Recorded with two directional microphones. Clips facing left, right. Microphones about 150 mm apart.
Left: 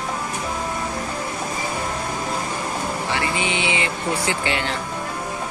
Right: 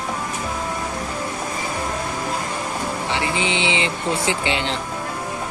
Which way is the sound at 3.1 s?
20° right (ahead or behind).